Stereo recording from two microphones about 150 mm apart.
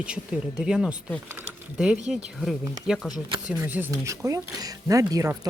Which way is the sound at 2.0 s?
Centre (ahead or behind).